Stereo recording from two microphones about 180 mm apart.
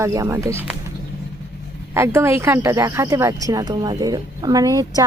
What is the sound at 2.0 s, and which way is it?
A woman's voice, 15° right (ahead or behind).